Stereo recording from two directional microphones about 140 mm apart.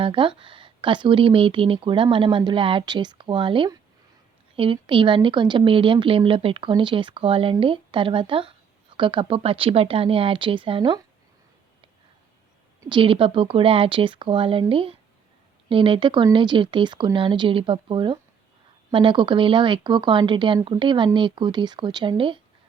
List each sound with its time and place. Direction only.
0.0 s speech: 35° right (ahead or behind)
12.9 s speech: 40° right (ahead or behind)